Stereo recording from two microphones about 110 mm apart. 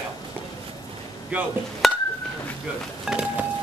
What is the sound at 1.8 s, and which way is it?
Chink, centre (ahead or behind).